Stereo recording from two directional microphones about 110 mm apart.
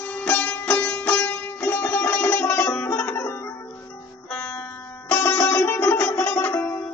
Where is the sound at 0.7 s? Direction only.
15° left (ahead or behind).